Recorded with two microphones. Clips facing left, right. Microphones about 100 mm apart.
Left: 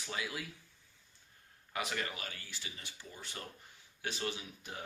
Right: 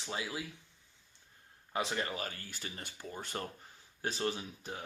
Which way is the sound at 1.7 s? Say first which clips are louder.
Right 3 dB; 30° right (ahead or behind).